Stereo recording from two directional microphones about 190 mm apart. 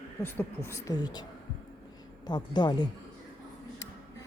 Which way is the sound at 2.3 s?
25° left (ahead or behind).